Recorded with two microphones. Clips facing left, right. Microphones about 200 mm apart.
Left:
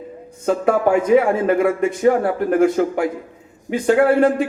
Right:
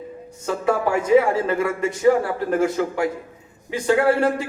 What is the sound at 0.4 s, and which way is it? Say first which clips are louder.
Speech: left 5 dB; 55° left (ahead or behind).